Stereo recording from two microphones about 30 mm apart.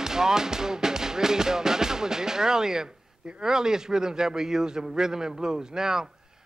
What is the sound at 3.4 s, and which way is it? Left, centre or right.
Speech, centre.